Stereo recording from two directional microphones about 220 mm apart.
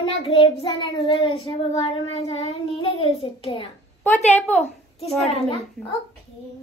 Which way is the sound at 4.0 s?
10° left (ahead or behind).